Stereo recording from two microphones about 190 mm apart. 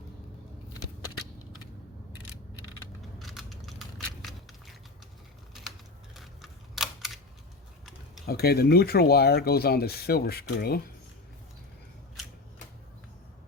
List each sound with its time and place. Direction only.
3.2 s crushing: centre (ahead or behind)
6.1 s camera: centre (ahead or behind)
8.3 s speech: 55° left (ahead or behind)